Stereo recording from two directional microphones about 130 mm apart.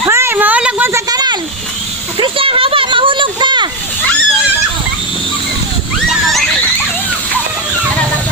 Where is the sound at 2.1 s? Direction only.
45° right (ahead or behind).